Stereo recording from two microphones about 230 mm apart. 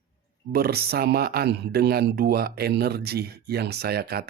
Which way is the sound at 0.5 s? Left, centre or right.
Right.